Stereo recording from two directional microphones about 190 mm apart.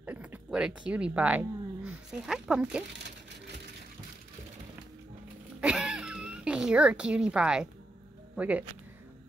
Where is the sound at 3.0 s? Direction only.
65° right (ahead or behind).